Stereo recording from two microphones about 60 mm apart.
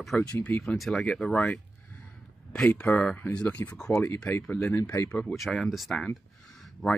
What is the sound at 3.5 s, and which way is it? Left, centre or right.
Speech, left.